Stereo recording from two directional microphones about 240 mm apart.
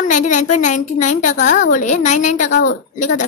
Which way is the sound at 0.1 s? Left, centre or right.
Left.